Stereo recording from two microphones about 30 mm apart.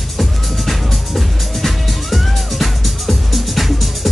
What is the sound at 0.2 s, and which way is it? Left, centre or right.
Music, centre.